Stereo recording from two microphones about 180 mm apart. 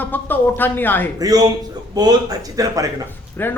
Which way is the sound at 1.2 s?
20° right (ahead or behind).